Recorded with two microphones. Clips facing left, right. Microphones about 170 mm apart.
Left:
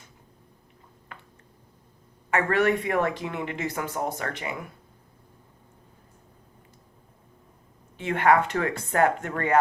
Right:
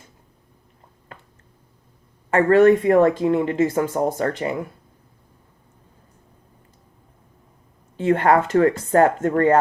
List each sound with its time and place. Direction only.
2.3 s speech: 35° right (ahead or behind)
7.9 s speech: 45° right (ahead or behind)